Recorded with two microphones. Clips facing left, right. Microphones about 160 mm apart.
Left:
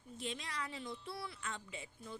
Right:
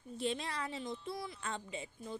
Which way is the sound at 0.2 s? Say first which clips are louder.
Right 6 dB; 30° right (ahead or behind).